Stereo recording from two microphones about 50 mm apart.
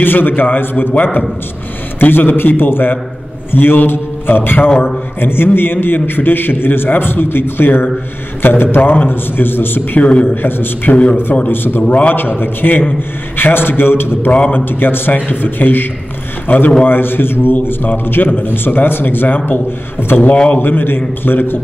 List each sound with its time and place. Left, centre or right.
0.0 s a man's voice: left
4.6 s a man's voice: left
5.2 s a man's voice: left
9.9 s a man's voice: left
10.3 s a man's voice: left
11.9 s a man's voice: left
12.2 s a man's voice: left